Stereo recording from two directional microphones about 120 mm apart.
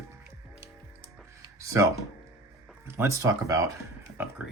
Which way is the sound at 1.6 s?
25° right (ahead or behind).